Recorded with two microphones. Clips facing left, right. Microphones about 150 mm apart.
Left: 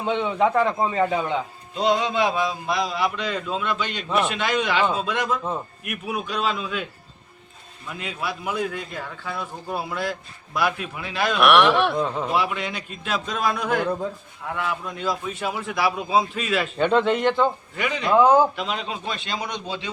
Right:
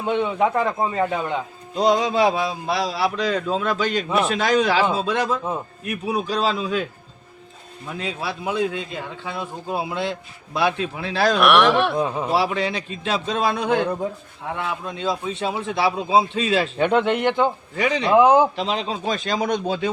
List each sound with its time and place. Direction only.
0.0 s a man's voice: 5° right (ahead or behind)
1.7 s a man's voice: 40° right (ahead or behind)
7.9 s speech: 30° right (ahead or behind)
11.3 s a man's voice: centre (ahead or behind)
11.9 s speech: 10° right (ahead or behind)
12.3 s speech: 35° right (ahead or behind)
16.7 s speech: 10° right (ahead or behind)
17.7 s a man's voice: 35° right (ahead or behind)
18.1 s speech: 15° right (ahead or behind)
18.5 s speech: 35° right (ahead or behind); by 19.9 s 50° right (ahead or behind)